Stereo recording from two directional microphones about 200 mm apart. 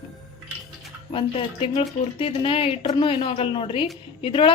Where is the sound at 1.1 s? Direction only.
25° left (ahead or behind).